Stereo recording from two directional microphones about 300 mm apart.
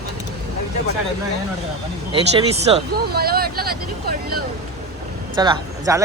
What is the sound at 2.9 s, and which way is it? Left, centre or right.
Speech, right.